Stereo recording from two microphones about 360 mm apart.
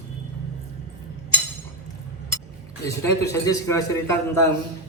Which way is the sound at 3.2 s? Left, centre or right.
Centre.